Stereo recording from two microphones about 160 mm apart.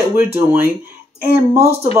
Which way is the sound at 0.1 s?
15° right (ahead or behind).